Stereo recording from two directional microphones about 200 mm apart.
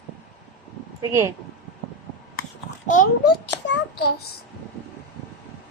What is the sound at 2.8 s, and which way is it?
Speech, 45° left (ahead or behind).